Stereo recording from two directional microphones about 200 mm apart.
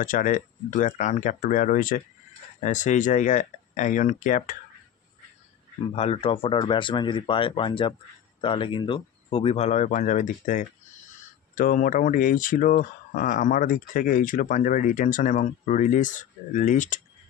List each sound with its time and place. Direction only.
0.0 s speech: 40° left (ahead or behind)
5.9 s speech: 30° left (ahead or behind)